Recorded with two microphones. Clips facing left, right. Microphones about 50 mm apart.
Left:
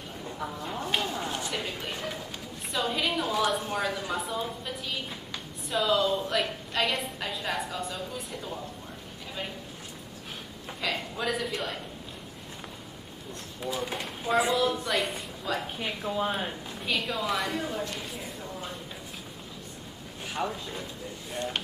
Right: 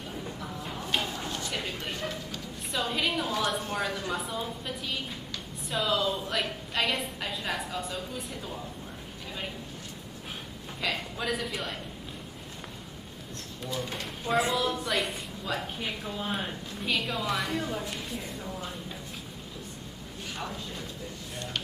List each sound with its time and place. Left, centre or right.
0.8 s a sound: centre
1.5 s a sound: centre
2.7 s speech: centre
10.8 s speech: centre
13.6 s speech: centre
20.3 s speech: centre